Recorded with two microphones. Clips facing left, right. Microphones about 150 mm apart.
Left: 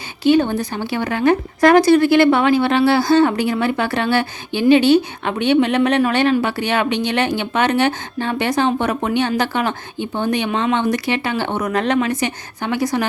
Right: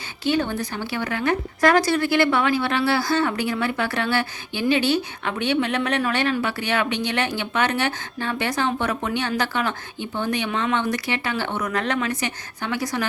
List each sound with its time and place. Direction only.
0.3 s a woman's voice: 20° left (ahead or behind)